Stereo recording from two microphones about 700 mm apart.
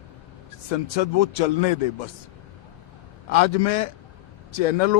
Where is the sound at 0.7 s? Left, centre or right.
Left.